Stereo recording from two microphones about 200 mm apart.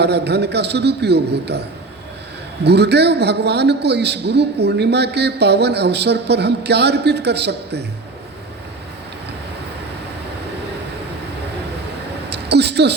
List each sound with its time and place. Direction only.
0.0 s a man's voice: 55° right (ahead or behind)
2.6 s a man's voice: 55° right (ahead or behind)
12.3 s a sound: 55° right (ahead or behind)